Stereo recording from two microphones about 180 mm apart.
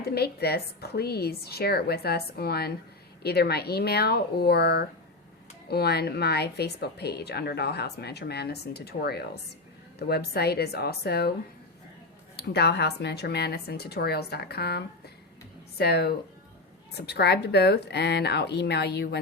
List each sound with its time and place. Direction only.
0.0 s speech: 60° left (ahead or behind)
12.5 s speech: 65° left (ahead or behind)